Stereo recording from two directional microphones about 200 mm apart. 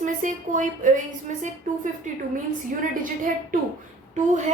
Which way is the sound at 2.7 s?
45° right (ahead or behind).